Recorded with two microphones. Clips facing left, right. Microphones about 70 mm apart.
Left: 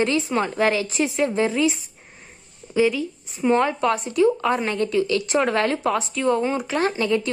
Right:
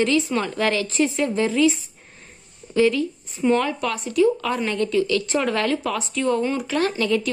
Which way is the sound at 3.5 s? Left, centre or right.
Left.